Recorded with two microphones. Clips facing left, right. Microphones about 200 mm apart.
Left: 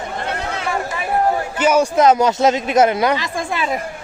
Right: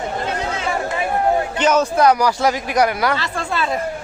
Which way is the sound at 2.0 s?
20° left (ahead or behind).